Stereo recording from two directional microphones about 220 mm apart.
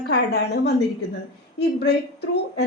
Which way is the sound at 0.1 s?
50° left (ahead or behind).